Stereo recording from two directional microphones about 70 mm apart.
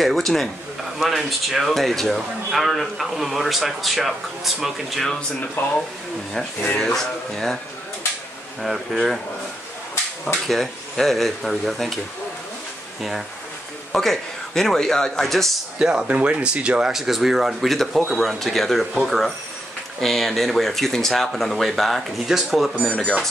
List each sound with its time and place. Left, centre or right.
0.0 s speech: centre
5.6 s speech: left
6.8 s speech: centre
8.6 s speech: centre
10.2 s speech: centre
13.9 s speech: centre
15.8 s speech: centre